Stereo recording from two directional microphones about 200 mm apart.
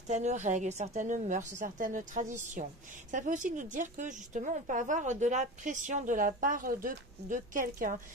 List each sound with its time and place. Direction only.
0.0 s a woman's voice: 35° right (ahead or behind)